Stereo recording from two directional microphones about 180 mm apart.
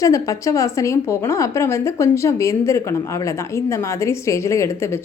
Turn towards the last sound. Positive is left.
turn(degrees=15)  # may be behind; listen again after turning